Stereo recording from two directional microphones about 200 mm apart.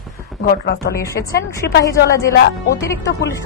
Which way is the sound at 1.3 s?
55° left (ahead or behind).